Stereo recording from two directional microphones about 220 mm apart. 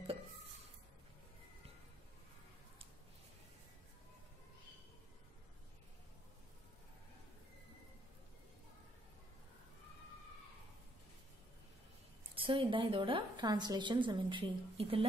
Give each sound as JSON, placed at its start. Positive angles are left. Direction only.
{"t": 12.4, "sound": "a woman's voice", "side_deg": -25}